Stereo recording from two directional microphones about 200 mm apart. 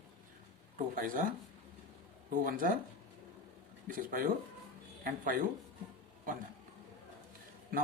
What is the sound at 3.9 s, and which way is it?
Speech, 45° right (ahead or behind).